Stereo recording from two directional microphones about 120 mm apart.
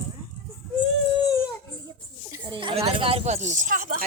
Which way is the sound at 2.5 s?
45° right (ahead or behind).